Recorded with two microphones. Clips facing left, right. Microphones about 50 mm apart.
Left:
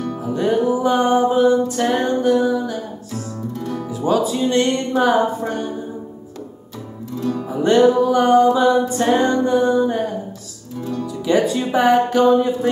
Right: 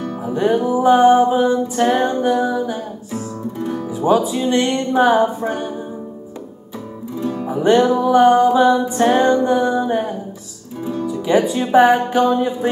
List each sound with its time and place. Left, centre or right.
0.0 s music: centre
0.4 s music: centre
7.2 s music: centre
10.9 s speech: centre